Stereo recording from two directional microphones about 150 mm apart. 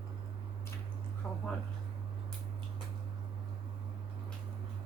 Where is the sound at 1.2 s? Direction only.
15° left (ahead or behind).